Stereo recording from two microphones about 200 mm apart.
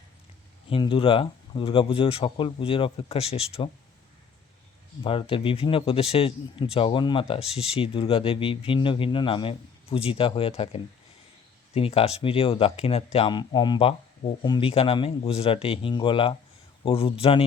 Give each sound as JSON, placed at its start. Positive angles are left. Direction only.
{"t": 0.7, "sound": "speech", "side_deg": 25}
{"t": 5.0, "sound": "speech", "side_deg": 25}